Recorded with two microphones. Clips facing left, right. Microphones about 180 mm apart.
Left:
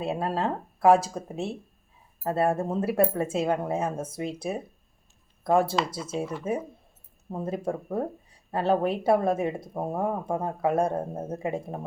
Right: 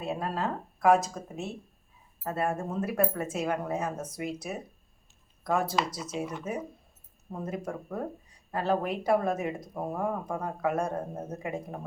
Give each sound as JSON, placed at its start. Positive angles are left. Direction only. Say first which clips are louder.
{"t": 0.0, "sound": "speech", "louder": "left 4 dB", "side_deg": 30}